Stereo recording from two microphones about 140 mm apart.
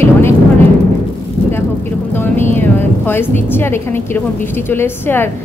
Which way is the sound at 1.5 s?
15° left (ahead or behind).